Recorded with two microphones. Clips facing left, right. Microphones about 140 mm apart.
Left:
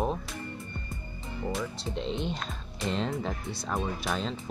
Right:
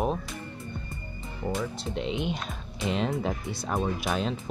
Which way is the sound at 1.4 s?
Centre (ahead or behind).